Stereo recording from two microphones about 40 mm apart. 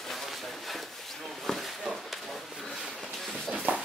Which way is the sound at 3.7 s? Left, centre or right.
Right.